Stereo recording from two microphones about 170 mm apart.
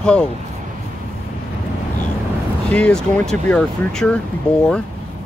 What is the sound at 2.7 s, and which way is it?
Speech, 5° left (ahead or behind).